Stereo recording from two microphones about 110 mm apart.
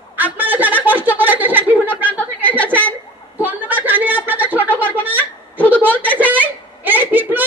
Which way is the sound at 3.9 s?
15° right (ahead or behind).